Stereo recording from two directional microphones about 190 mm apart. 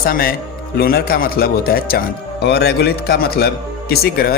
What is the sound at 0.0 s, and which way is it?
Speech, 50° left (ahead or behind).